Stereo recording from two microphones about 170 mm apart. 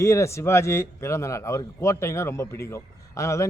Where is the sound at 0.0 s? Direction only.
15° left (ahead or behind).